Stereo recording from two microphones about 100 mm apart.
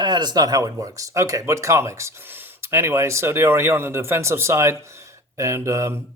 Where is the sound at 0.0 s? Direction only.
45° right (ahead or behind).